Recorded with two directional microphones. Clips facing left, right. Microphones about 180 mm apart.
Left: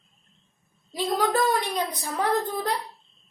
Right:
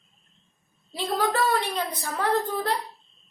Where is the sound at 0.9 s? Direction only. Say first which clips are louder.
Left 2 dB; 15° left (ahead or behind).